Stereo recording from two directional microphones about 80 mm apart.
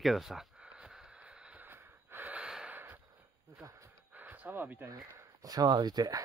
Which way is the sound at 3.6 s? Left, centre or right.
Right.